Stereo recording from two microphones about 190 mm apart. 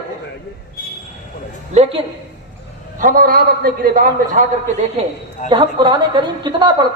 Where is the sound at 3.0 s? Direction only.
50° right (ahead or behind).